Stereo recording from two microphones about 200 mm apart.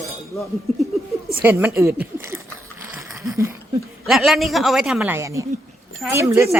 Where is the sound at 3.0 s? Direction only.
15° right (ahead or behind).